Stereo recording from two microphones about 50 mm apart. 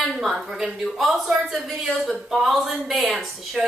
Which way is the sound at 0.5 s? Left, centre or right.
Centre.